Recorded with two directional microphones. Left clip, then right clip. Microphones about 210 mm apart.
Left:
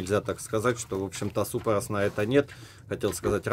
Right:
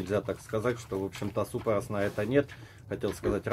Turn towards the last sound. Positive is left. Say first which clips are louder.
# left 3 dB
turn(degrees=50)  # may be behind; listen again after turning